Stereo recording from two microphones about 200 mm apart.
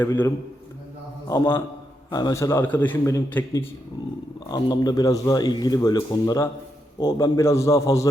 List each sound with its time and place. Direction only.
0.0 s a man's voice: 10° left (ahead or behind)
1.3 s a man's voice: 15° left (ahead or behind)